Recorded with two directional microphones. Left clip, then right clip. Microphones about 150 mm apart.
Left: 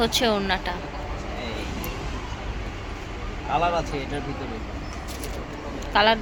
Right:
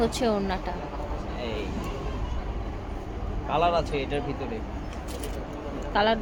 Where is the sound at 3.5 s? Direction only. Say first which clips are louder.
Even; 25° right (ahead or behind).